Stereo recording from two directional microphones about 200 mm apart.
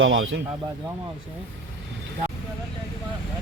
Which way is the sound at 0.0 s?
70° right (ahead or behind).